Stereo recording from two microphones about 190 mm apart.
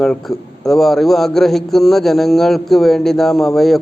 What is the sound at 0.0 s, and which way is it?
A man's voice, centre (ahead or behind).